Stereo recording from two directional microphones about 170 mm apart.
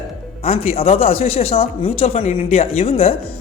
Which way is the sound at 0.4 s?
35° left (ahead or behind).